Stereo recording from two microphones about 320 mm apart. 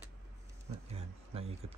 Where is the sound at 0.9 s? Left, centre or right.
Centre.